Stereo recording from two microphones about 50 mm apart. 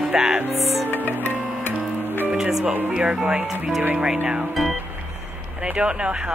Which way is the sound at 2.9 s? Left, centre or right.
Right.